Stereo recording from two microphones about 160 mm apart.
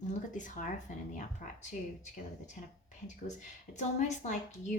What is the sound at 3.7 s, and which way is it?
A woman's voice, 45° left (ahead or behind).